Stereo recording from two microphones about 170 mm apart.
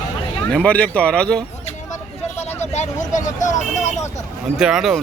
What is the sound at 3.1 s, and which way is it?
Vehicle, 45° left (ahead or behind).